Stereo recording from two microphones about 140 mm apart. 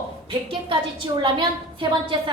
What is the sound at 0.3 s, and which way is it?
A woman's voice, 35° right (ahead or behind).